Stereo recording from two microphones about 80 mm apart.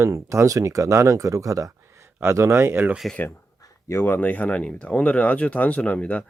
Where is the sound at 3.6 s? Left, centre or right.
Left.